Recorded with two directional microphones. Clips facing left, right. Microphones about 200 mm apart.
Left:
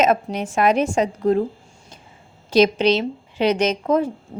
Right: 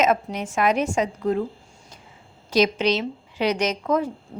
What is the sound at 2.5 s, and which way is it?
Speech, 30° left (ahead or behind).